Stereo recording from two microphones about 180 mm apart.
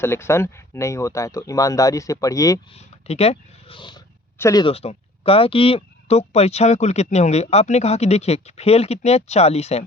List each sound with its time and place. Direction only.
0.0 s speech: 15° left (ahead or behind)
2.7 s speech: 35° left (ahead or behind); by 4.6 s 15° left (ahead or behind)
4.6 s speech: 35° left (ahead or behind)